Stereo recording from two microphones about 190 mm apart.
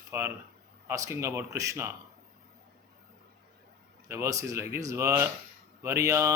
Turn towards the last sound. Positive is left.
turn(degrees=-15)  # may be behind; listen again after turning